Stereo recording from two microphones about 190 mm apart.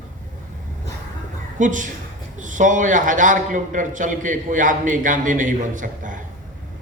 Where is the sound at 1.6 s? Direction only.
45° right (ahead or behind).